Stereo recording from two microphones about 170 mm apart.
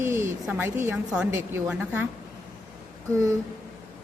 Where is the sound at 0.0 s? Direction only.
15° right (ahead or behind).